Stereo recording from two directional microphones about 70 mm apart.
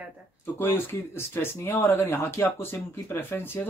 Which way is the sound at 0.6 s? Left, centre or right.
Left.